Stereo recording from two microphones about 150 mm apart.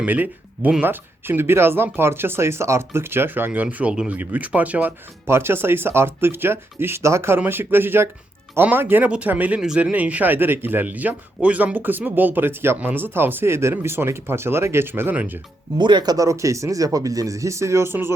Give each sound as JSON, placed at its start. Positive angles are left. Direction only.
{"t": 0.0, "sound": "speech", "side_deg": -10}
{"t": 15.8, "sound": "speech", "side_deg": -30}